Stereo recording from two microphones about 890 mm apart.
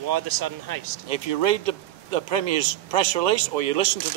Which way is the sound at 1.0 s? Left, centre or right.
Right.